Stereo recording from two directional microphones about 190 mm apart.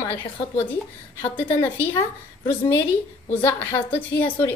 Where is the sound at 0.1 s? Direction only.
30° left (ahead or behind).